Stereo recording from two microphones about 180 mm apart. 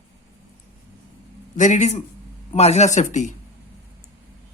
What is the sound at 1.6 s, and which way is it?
Speech, 40° left (ahead or behind).